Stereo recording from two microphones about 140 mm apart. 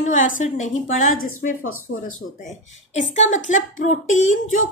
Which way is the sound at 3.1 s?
60° left (ahead or behind).